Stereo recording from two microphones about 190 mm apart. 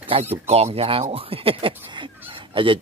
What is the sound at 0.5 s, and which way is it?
Speech, 35° right (ahead or behind).